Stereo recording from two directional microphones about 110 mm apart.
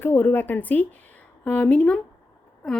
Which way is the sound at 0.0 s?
20° left (ahead or behind).